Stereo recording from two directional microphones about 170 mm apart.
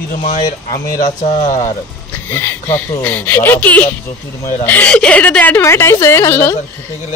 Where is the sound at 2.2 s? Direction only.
10° left (ahead or behind).